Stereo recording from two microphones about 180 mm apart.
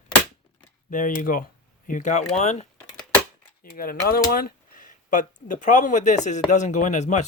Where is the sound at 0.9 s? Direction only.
45° left (ahead or behind).